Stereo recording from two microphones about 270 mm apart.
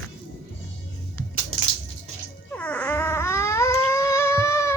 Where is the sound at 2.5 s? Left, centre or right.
Centre.